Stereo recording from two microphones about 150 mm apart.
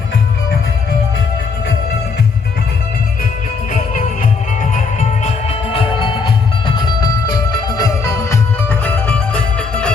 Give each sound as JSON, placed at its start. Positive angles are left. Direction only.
{"t": 5.2, "sound": "music", "side_deg": 40}